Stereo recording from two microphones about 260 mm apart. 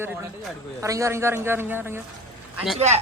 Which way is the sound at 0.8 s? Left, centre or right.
Centre.